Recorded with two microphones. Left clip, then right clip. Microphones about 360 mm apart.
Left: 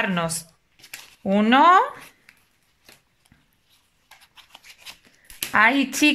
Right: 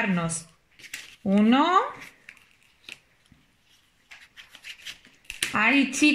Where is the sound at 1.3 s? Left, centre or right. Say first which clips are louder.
Left 6 dB; left.